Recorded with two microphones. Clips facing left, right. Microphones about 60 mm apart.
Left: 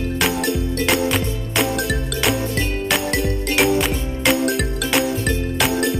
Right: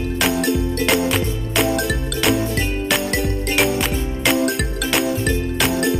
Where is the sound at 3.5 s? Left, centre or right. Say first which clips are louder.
Left 2 dB; centre.